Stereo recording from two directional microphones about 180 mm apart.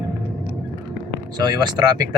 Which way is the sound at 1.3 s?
25° right (ahead or behind).